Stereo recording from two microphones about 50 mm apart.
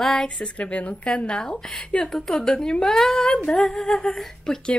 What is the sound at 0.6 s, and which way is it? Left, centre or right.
A woman's voice, left.